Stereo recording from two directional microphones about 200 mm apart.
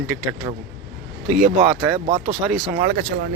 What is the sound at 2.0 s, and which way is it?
Speech, 30° right (ahead or behind).